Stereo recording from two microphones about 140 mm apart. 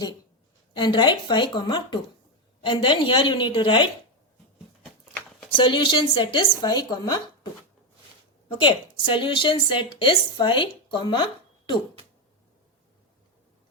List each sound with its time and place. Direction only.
0.8 s a woman's voice: 35° left (ahead or behind)
5.1 s a sound: 10° left (ahead or behind)
5.5 s a woman's voice: 35° left (ahead or behind)
8.4 s a woman's voice: 40° left (ahead or behind)